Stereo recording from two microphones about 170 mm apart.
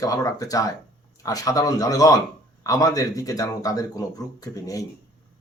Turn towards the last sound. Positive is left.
turn(degrees=20)  # may be behind; listen again after turning